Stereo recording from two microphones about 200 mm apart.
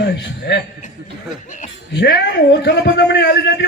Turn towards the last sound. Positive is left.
turn(degrees=60)  # may be behind; listen again after turning